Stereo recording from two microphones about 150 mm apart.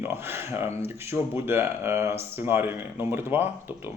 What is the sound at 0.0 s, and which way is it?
Speech, 15° right (ahead or behind).